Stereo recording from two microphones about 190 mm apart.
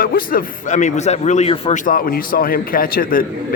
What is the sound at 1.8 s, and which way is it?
A man's voice, 50° left (ahead or behind).